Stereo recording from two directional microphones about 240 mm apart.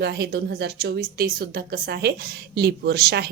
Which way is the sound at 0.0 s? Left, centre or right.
Right.